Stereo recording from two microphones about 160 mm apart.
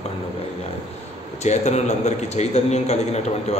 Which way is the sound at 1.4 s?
45° left (ahead or behind).